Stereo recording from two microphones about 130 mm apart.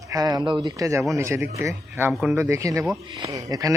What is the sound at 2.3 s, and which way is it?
Speech, 20° right (ahead or behind).